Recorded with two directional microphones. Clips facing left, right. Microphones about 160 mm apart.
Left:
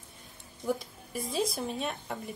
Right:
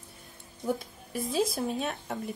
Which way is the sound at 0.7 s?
Centre (ahead or behind).